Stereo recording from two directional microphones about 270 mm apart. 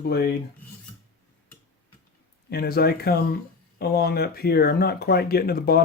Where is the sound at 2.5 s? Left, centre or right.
Left.